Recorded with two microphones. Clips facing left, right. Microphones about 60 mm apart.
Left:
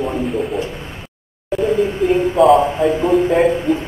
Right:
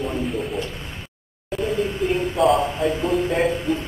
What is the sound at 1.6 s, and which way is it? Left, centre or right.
A man's voice, centre.